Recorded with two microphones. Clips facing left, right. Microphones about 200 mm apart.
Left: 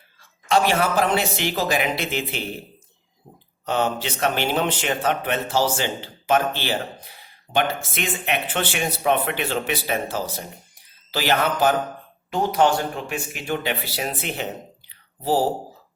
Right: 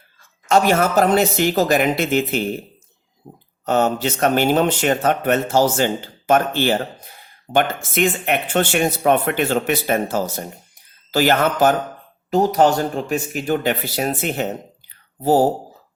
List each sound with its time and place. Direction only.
0.2 s speech: 45° right (ahead or behind)
3.7 s speech: 45° right (ahead or behind)
14.8 s a sound: 50° right (ahead or behind)